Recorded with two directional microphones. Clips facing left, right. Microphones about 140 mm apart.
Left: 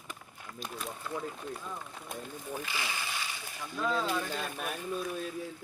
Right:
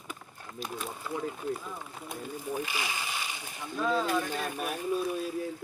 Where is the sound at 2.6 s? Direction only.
15° right (ahead or behind).